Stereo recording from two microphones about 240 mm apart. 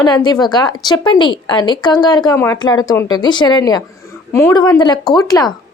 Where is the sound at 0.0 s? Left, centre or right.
Centre.